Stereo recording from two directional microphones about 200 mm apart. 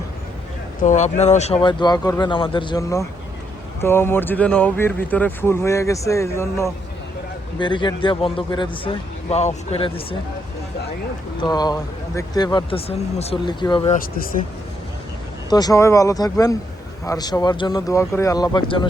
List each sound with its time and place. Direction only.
0.8 s speech: 35° left (ahead or behind)
1.6 s speech: 20° left (ahead or behind)
7.6 s speech: 25° left (ahead or behind)
11.3 s speech: 20° left (ahead or behind)
13.9 s speech: 45° left (ahead or behind)
15.4 s speech: 20° left (ahead or behind)